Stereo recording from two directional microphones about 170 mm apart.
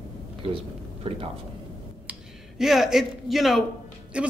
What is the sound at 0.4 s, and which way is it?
Speech, 35° right (ahead or behind).